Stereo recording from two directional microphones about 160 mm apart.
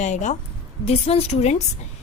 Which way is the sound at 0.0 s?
50° left (ahead or behind).